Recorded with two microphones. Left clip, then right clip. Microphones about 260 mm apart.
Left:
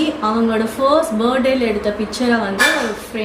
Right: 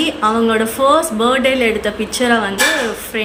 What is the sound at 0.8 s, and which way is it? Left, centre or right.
Speech, centre.